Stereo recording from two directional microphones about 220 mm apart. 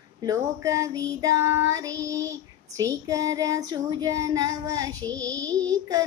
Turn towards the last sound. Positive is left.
turn(degrees=-15)  # may be behind; listen again after turning